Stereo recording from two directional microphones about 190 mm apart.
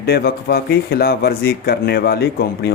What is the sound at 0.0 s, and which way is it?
A man's voice, 55° left (ahead or behind).